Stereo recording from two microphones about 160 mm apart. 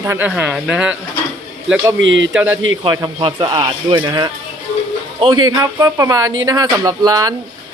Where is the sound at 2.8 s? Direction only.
25° right (ahead or behind).